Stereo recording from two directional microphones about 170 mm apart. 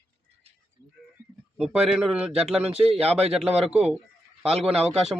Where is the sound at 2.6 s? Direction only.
35° right (ahead or behind).